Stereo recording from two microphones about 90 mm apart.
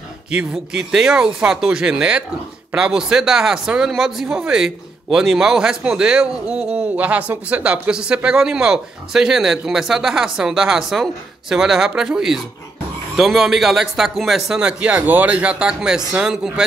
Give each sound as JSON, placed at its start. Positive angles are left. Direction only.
{"t": 0.3, "sound": "speech", "side_deg": -10}